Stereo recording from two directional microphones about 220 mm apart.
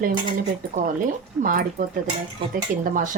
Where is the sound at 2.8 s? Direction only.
35° right (ahead or behind).